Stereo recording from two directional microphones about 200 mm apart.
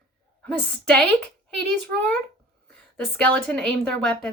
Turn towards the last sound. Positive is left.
turn(degrees=5)  # may be behind; listen again after turning